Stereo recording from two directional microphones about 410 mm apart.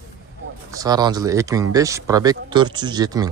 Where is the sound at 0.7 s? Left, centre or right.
Centre.